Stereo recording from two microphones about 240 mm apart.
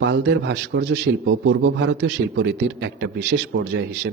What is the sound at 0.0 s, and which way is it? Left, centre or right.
A man's voice, right.